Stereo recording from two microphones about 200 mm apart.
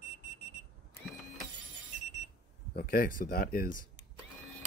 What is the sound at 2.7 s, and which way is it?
Speech, 50° left (ahead or behind).